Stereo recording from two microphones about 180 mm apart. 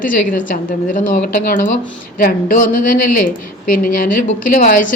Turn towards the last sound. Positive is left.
turn(degrees=50)  # may be behind; listen again after turning